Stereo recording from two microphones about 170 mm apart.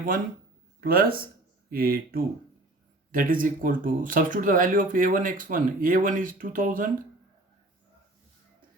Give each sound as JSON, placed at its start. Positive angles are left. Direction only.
{"t": 0.8, "sound": "speech", "side_deg": -60}